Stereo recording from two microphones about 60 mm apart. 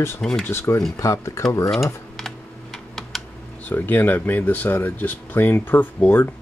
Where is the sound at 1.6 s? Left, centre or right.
Centre.